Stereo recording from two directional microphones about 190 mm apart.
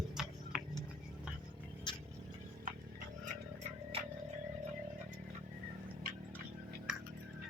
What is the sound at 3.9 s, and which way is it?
Frog, 30° right (ahead or behind).